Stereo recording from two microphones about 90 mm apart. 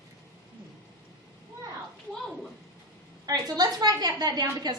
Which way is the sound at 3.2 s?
45° right (ahead or behind).